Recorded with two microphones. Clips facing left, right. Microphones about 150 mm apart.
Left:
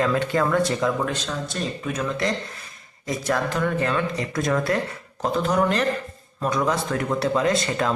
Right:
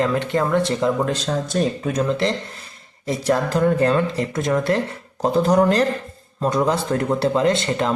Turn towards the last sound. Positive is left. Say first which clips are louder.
# right 3 dB
turn(degrees=-25)  # may be behind; listen again after turning